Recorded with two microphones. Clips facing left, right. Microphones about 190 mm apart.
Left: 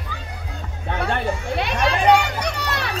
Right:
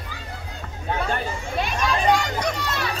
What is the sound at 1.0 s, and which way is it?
Children playing, 70° left (ahead or behind).